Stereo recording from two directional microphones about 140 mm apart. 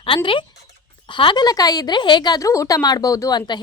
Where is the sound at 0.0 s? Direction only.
40° left (ahead or behind).